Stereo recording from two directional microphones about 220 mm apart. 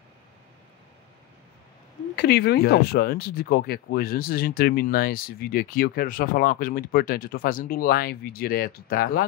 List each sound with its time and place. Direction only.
2.1 s speech: 45° left (ahead or behind)